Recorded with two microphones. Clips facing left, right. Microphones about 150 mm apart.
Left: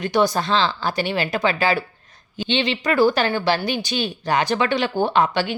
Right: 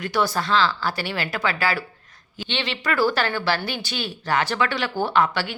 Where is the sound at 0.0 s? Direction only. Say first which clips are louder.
Left 4 dB; 20° left (ahead or behind).